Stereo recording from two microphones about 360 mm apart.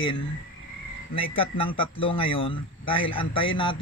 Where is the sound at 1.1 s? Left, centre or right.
Centre.